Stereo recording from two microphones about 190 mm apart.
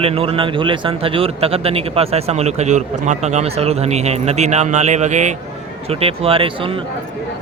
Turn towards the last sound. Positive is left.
turn(degrees=-30)  # may be behind; listen again after turning